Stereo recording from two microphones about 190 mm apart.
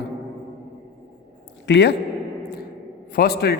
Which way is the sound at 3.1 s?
55° left (ahead or behind).